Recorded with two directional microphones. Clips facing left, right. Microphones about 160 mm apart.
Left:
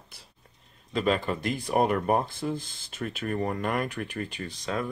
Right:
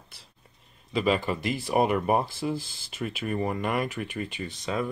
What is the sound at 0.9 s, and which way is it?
Speech, 5° right (ahead or behind).